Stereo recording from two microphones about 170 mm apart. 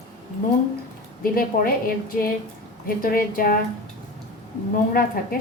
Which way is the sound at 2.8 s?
55° left (ahead or behind).